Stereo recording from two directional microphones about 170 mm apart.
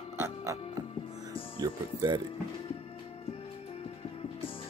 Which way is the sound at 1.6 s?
25° right (ahead or behind).